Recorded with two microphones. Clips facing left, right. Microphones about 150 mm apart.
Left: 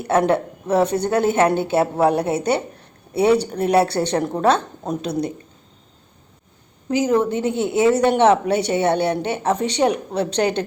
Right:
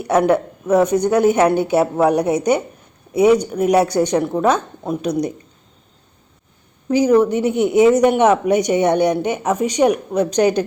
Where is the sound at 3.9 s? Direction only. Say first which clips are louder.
Right 4 dB; 10° right (ahead or behind).